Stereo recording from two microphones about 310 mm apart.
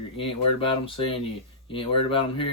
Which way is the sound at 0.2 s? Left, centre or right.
Centre.